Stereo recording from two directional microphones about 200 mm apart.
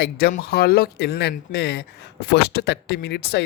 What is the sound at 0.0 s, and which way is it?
Speech, 55° left (ahead or behind).